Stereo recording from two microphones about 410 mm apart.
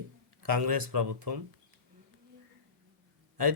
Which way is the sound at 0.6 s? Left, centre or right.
Right.